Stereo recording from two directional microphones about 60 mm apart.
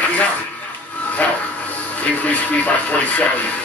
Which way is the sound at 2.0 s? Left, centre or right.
Left.